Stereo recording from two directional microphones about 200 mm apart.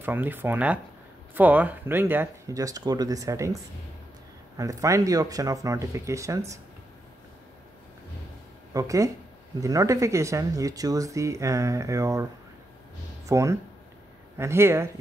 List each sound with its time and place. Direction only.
0.0 s speech: 10° right (ahead or behind)
4.6 s speech: 15° right (ahead or behind)
8.7 s speech: 15° right (ahead or behind)
13.3 s speech: 15° right (ahead or behind)